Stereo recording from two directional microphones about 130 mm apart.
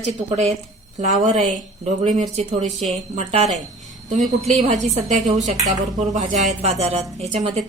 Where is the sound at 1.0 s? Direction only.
70° right (ahead or behind).